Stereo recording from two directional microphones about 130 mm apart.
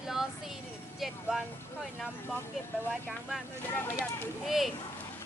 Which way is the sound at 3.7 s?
20° left (ahead or behind).